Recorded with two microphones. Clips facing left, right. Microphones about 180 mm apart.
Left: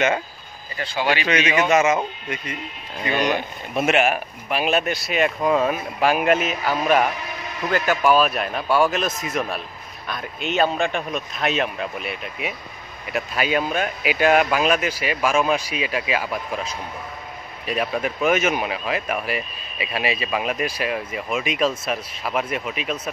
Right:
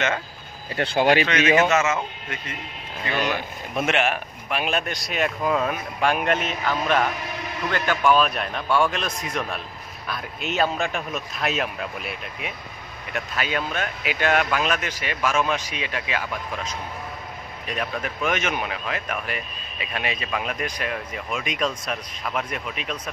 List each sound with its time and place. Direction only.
0.7 s a man's voice: 65° right (ahead or behind); by 1.7 s 45° right (ahead or behind)
1.7 s speech: 15° left (ahead or behind)
3.7 s speech: 5° left (ahead or behind)
17.6 s speech: 10° left (ahead or behind)